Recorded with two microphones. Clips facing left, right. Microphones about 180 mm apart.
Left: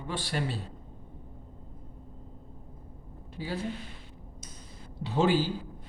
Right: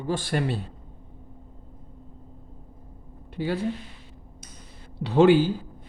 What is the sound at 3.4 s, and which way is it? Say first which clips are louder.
Speech: right 9 dB; 65° right (ahead or behind).